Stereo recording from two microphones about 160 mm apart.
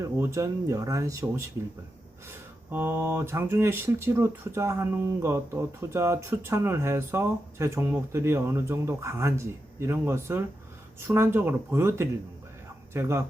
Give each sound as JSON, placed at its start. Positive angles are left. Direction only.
{"t": 0.0, "sound": "speech", "side_deg": -20}
{"t": 2.6, "sound": "speech", "side_deg": -15}